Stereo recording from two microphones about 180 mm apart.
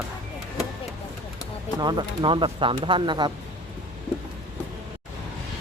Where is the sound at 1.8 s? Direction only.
25° right (ahead or behind).